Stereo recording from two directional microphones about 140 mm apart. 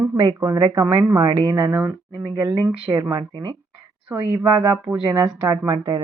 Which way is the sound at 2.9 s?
30° right (ahead or behind).